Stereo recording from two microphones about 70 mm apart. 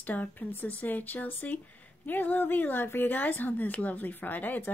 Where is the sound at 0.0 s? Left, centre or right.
Left.